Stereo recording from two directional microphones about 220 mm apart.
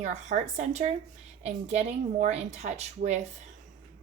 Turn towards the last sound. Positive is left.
turn(degrees=-30)  # may be behind; listen again after turning